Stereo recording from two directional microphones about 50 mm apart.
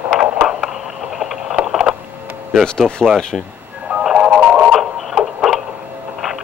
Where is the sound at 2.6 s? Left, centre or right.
Centre.